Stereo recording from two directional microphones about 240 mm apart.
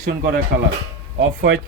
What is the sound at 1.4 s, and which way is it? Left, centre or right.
Speech, right.